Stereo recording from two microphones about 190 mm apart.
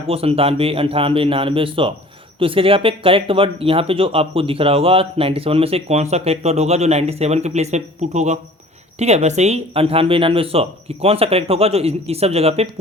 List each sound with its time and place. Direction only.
0.1 s speech: 30° right (ahead or behind)